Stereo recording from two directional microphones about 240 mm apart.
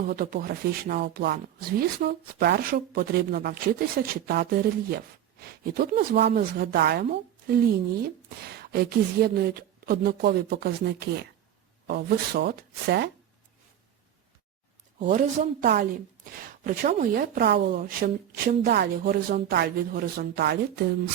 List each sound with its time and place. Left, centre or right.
0.0 s speech: right
8.5 s speech: right
14.9 s speech: right